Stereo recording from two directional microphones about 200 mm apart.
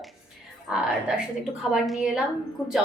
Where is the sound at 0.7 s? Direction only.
5° right (ahead or behind).